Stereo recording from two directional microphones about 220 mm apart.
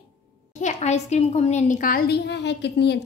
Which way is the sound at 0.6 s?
30° left (ahead or behind).